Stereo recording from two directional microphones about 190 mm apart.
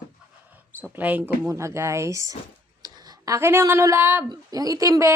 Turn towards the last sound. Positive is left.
turn(degrees=-15)  # may be behind; listen again after turning